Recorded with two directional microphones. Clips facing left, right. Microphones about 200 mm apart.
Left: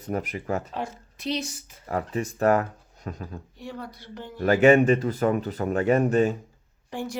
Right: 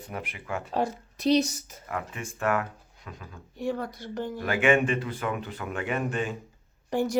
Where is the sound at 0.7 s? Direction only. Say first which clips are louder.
Right 5 dB; 40° right (ahead or behind).